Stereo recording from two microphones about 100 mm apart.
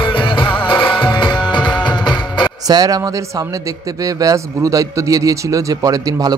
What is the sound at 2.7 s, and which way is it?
A man's voice, 40° right (ahead or behind).